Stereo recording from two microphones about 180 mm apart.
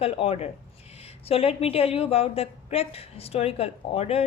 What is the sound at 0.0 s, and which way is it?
A woman's voice, 35° left (ahead or behind).